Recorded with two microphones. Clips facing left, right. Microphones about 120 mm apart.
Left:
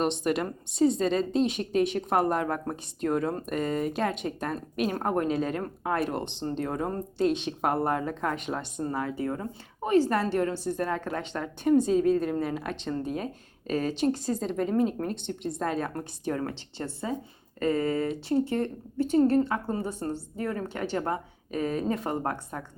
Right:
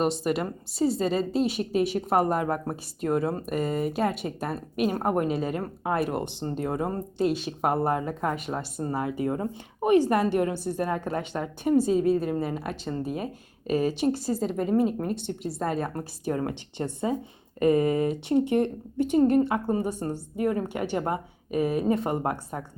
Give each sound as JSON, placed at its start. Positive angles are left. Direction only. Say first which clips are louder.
{"t": 0.0, "sound": "a woman's voice", "louder": "right 1 dB", "side_deg": -5}